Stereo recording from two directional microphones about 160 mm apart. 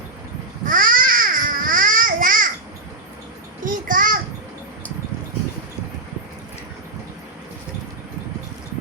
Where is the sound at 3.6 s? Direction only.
60° right (ahead or behind).